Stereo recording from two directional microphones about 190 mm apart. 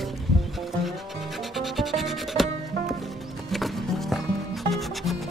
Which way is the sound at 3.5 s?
Centre (ahead or behind).